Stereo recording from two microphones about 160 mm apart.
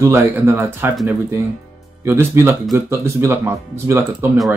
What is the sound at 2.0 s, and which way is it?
Speech, 15° right (ahead or behind).